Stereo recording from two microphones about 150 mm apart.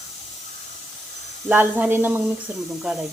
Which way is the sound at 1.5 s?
10° right (ahead or behind).